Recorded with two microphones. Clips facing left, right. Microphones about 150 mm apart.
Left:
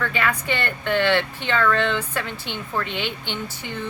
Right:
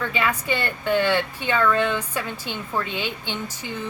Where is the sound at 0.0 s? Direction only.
10° right (ahead or behind).